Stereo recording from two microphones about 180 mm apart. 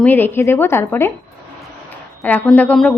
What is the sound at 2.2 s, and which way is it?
Speech, 10° left (ahead or behind).